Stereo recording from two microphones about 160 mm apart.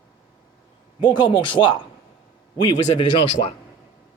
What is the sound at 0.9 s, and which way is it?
Speech, 30° left (ahead or behind).